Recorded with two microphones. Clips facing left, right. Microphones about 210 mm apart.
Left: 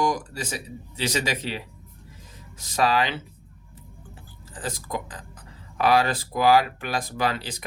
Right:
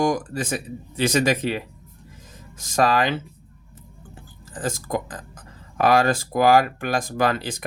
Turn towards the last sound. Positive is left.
turn(degrees=-50)  # may be behind; listen again after turning